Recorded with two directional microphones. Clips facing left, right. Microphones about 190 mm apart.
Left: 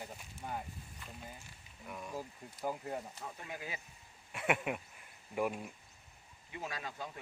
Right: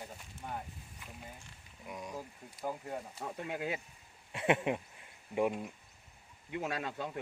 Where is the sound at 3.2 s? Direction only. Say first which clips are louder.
Right 7 dB; 65° right (ahead or behind).